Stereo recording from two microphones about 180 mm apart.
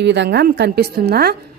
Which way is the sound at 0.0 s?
75° right (ahead or behind).